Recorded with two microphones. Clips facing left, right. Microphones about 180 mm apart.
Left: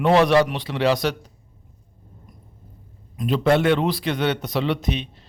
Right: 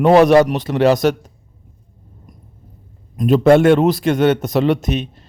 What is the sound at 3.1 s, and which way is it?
A man's voice, 45° right (ahead or behind).